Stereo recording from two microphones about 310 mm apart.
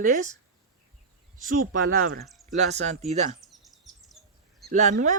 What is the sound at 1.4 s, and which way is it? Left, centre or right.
Speech, right.